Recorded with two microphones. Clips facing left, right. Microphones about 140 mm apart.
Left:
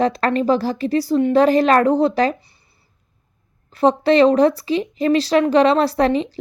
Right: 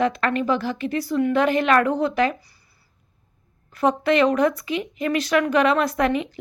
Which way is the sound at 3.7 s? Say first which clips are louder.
Left 5 dB; 30° left (ahead or behind).